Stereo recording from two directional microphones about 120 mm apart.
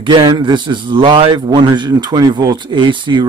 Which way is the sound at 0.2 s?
40° right (ahead or behind).